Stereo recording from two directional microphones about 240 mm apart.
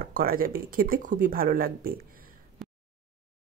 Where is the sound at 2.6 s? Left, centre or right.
Centre.